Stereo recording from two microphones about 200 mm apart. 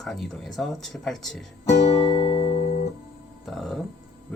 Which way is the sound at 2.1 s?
25° left (ahead or behind).